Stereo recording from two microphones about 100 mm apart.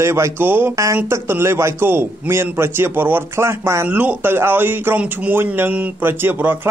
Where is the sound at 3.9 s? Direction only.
15° right (ahead or behind).